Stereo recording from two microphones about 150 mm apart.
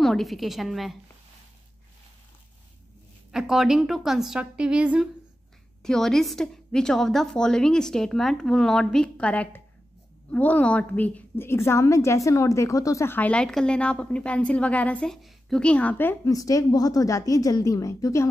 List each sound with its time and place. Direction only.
0.0 s a woman's voice: centre (ahead or behind)
3.3 s a woman's voice: 5° right (ahead or behind)
5.8 s a woman's voice: 5° left (ahead or behind); by 18.3 s 20° left (ahead or behind)